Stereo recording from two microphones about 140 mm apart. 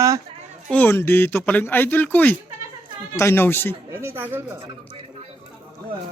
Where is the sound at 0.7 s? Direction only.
15° left (ahead or behind).